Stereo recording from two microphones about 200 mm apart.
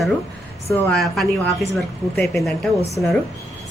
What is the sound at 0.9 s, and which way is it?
A woman's voice, centre (ahead or behind).